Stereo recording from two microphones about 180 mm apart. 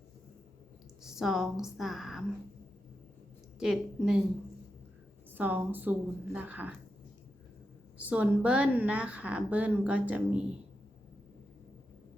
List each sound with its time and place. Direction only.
1.0 s a woman's voice: centre (ahead or behind)
3.6 s a woman's voice: 5° right (ahead or behind)
5.3 s a woman's voice: 10° right (ahead or behind)
7.9 s a woman's voice: 10° right (ahead or behind)